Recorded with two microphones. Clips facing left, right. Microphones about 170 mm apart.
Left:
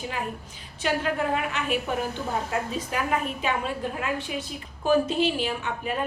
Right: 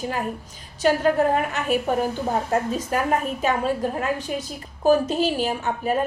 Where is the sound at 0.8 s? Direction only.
40° right (ahead or behind).